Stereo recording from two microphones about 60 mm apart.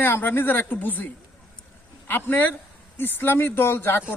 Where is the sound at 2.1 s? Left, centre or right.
Left.